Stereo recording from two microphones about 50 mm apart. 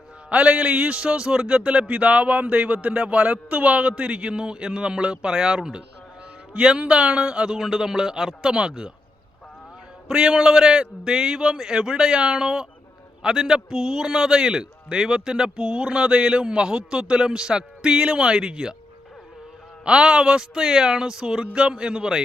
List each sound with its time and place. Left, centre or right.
0.3 s a man's voice: centre
10.1 s a man's voice: centre
19.8 s a man's voice: centre